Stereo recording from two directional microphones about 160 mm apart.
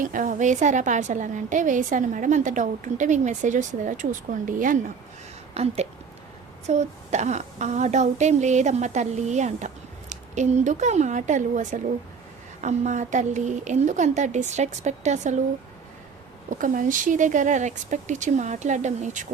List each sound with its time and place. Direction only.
0.0 s a woman's voice: 55° right (ahead or behind)
5.5 s a woman's voice: 40° right (ahead or behind)
16.5 s a woman's voice: 55° right (ahead or behind)